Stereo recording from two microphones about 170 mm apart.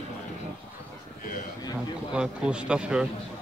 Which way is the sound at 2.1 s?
5° right (ahead or behind).